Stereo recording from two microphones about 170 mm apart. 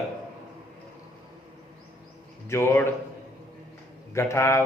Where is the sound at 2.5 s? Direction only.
15° left (ahead or behind).